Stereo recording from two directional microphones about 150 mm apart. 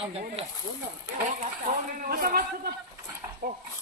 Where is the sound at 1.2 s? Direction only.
60° right (ahead or behind); by 2.7 s 75° right (ahead or behind).